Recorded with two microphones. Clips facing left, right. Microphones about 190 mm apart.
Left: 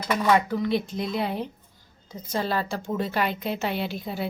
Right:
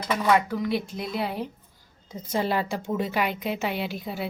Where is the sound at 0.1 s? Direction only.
Centre (ahead or behind).